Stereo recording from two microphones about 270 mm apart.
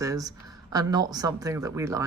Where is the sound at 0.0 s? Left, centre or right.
Centre.